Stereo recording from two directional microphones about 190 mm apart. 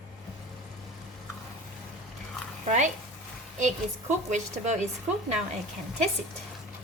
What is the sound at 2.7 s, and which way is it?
Speech, 40° right (ahead or behind).